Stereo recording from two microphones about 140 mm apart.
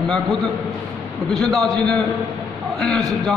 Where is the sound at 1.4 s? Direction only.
5° left (ahead or behind).